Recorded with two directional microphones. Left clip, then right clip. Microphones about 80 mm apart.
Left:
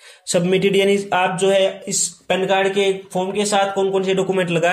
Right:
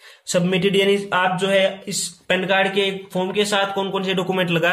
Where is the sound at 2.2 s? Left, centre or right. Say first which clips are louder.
Left 1 dB; centre.